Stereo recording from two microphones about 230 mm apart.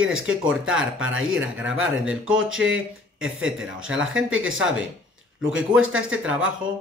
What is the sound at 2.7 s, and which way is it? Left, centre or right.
Speech, right.